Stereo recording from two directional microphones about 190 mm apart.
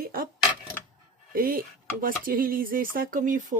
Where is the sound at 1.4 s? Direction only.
50° right (ahead or behind).